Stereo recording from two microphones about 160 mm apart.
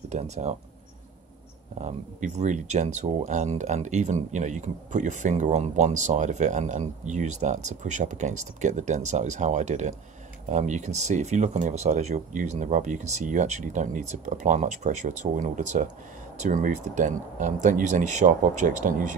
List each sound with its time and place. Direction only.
0.1 s speech: 45° right (ahead or behind)
1.8 s speech: 50° right (ahead or behind)